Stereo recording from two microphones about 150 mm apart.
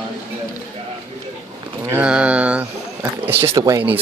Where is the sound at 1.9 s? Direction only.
5° right (ahead or behind).